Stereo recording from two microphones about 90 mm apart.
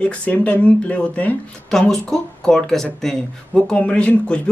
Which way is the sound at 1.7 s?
5° left (ahead or behind).